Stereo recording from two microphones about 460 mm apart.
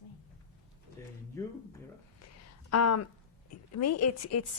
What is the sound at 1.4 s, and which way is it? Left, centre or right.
Speech, centre.